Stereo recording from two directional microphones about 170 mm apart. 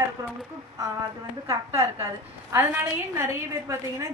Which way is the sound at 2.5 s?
15° right (ahead or behind).